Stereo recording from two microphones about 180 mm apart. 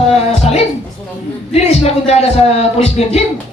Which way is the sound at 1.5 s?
35° left (ahead or behind).